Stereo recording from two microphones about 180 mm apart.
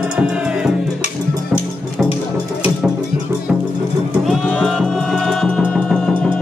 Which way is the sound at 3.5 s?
5° right (ahead or behind).